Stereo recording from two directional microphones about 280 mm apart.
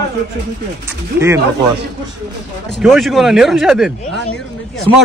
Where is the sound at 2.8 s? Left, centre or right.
Centre.